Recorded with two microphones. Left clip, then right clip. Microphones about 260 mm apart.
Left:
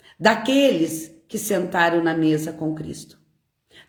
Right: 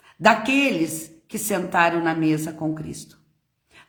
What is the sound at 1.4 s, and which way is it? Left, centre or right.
A woman's voice, centre.